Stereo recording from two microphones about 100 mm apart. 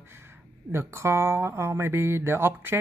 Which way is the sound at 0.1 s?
25° right (ahead or behind).